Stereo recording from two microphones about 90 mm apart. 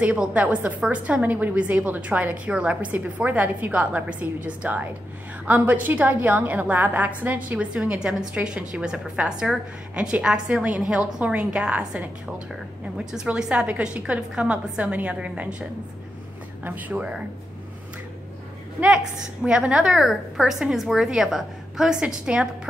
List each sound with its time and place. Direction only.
0.0 s a woman's voice: 15° right (ahead or behind)
16.6 s a woman's voice: 20° right (ahead or behind)
19.4 s a woman's voice: 10° right (ahead or behind)